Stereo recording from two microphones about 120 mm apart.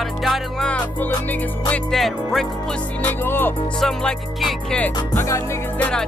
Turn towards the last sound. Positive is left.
turn(degrees=10)  # may be behind; listen again after turning